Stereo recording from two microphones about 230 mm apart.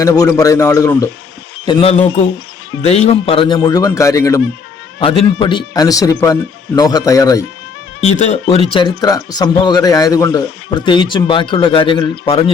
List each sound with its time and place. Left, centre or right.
0.0 s speech: centre
1.6 s speech: left
8.2 s speech: left